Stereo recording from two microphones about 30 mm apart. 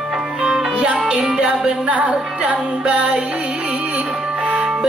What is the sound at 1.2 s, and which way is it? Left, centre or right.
Music, right.